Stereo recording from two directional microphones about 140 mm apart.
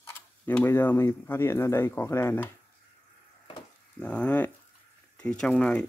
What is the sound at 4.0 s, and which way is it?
Speech, 10° left (ahead or behind).